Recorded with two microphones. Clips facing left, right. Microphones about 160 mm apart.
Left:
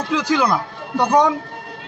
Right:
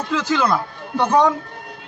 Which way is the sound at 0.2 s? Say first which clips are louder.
Even; 15° left (ahead or behind).